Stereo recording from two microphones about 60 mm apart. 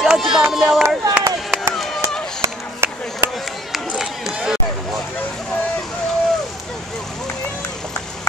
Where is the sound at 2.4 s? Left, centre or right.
Right.